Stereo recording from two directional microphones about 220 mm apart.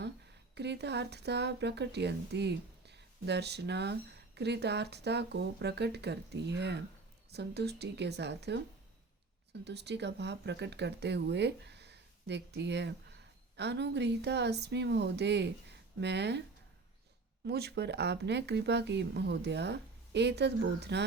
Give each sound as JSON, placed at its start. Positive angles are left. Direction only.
{"t": 0.5, "sound": "speech", "side_deg": -50}
{"t": 17.4, "sound": "speech", "side_deg": -45}